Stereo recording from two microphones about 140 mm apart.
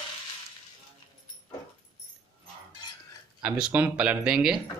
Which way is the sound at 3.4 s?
10° right (ahead or behind).